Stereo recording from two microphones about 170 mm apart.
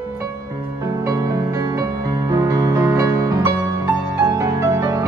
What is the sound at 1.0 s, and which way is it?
Music, 20° right (ahead or behind).